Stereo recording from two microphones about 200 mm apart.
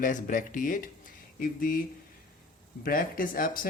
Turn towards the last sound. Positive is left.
turn(degrees=45)  # may be behind; listen again after turning